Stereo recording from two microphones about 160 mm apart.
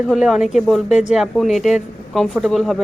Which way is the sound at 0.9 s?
45° left (ahead or behind).